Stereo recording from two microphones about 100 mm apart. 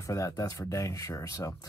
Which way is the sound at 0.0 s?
30° left (ahead or behind).